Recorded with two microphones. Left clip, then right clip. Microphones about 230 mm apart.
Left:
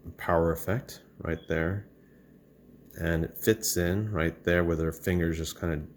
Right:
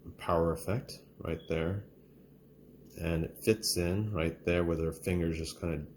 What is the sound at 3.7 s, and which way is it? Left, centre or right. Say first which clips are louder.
Speech: left 4 dB; left.